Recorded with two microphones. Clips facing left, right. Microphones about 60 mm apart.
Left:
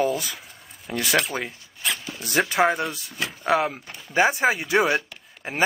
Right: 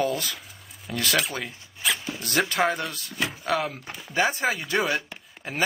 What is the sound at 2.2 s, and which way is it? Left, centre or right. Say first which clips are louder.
Speech: left 4 dB; centre.